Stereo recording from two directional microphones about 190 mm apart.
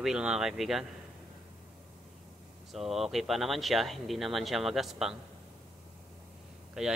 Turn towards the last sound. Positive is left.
turn(degrees=-5)  # may be behind; listen again after turning